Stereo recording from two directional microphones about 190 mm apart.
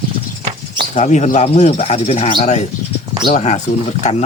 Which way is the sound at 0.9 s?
40° left (ahead or behind).